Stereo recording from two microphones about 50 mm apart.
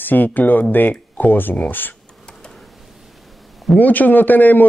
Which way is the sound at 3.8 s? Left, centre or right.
Left.